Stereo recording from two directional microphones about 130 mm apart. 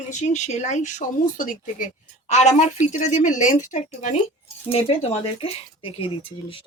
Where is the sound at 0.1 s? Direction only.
65° left (ahead or behind).